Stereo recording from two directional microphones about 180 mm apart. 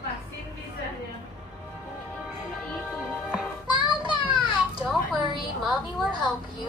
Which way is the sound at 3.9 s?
25° left (ahead or behind).